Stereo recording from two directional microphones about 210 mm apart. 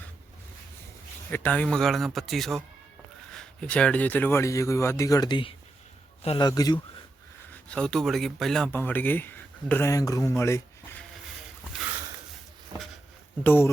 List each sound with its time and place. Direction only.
1.3 s a man's voice: 10° left (ahead or behind)
7.5 s speech: 5° left (ahead or behind)
13.4 s speech: 10° left (ahead or behind)